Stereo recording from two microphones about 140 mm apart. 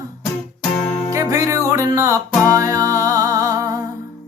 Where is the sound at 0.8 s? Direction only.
5° left (ahead or behind).